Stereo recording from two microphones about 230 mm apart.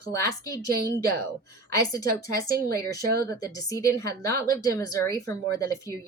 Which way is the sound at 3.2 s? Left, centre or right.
Centre.